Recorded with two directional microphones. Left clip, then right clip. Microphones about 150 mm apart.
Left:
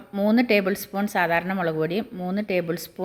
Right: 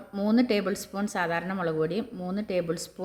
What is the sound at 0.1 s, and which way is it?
Speech, 25° left (ahead or behind).